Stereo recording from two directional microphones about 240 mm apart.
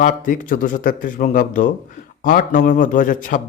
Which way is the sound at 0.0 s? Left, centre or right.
Left.